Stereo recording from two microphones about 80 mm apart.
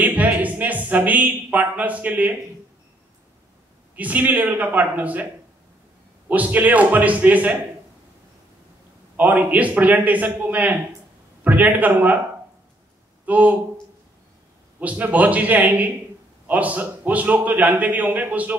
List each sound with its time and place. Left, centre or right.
0.0 s a sound: centre
3.9 s a man's voice: right
6.2 s a man's voice: centre
9.1 s a man's voice: centre
13.2 s speech: centre
14.8 s a man's voice: centre